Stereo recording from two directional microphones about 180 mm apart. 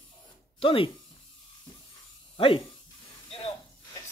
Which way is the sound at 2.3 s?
30° left (ahead or behind).